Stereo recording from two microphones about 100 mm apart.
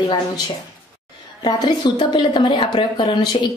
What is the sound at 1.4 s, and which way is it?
A woman's voice, 50° left (ahead or behind).